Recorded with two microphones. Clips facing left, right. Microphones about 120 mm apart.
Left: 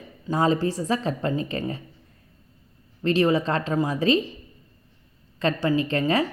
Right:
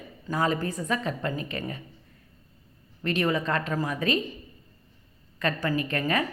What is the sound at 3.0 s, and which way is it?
Speech, 30° left (ahead or behind).